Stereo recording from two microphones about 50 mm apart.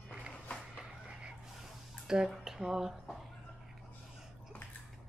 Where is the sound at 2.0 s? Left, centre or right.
Centre.